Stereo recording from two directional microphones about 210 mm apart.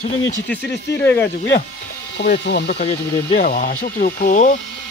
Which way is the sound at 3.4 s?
40° left (ahead or behind).